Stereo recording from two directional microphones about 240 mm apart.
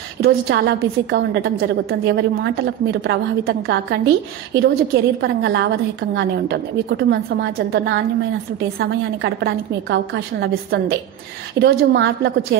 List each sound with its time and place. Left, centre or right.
0.2 s a woman's voice: right